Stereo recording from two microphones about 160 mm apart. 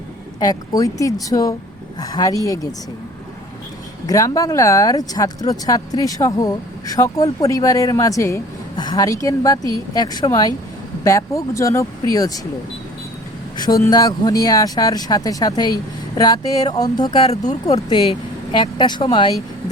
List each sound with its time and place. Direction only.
0.3 s speech: 25° left (ahead or behind)
4.0 s speech: 20° left (ahead or behind)
13.6 s speech: 25° left (ahead or behind)